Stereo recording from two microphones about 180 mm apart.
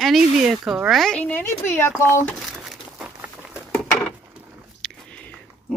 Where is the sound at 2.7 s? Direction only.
5° right (ahead or behind).